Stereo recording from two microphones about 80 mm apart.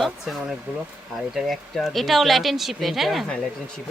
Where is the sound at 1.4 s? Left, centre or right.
Centre.